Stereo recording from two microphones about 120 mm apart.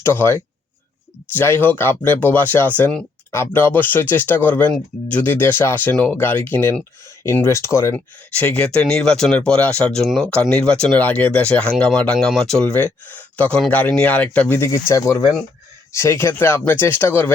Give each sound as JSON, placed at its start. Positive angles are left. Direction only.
{"t": 0.0, "sound": "speech", "side_deg": 20}